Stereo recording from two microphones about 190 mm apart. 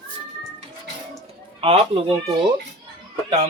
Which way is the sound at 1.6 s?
30° right (ahead or behind).